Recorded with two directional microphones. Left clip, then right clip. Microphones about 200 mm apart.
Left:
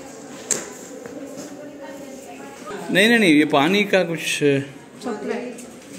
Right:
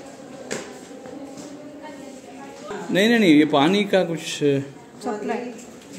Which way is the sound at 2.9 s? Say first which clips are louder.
Left 1 dB; 10° right (ahead or behind).